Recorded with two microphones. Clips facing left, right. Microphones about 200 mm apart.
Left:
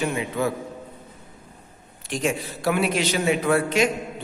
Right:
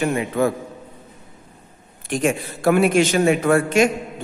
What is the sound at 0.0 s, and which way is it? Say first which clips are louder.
Speech: right 5 dB; 55° right (ahead or behind).